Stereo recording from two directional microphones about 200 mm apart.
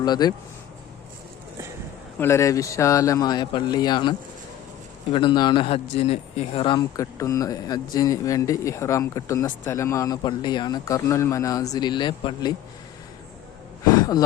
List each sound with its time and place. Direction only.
0.0 s a man's voice: 20° left (ahead or behind)
2.1 s speech: 15° left (ahead or behind)
5.1 s a man's voice: 20° left (ahead or behind)
13.8 s speech: 15° left (ahead or behind)